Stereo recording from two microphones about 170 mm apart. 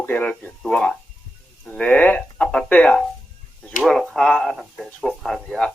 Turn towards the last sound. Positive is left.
turn(degrees=0)  # may be behind; listen again after turning